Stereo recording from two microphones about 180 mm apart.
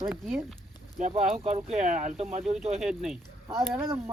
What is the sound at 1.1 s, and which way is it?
Speech, 35° right (ahead or behind).